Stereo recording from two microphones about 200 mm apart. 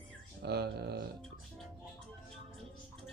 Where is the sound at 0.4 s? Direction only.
55° right (ahead or behind).